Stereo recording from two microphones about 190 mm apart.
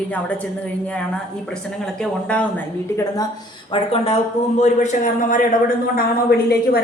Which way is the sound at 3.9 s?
30° left (ahead or behind).